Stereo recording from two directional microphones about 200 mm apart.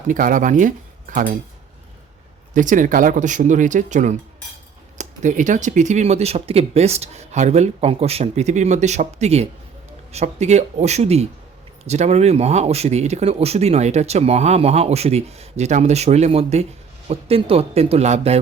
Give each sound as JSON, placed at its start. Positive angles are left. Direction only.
{"t": 0.1, "sound": "speech", "side_deg": -40}
{"t": 2.5, "sound": "a man's voice", "side_deg": -40}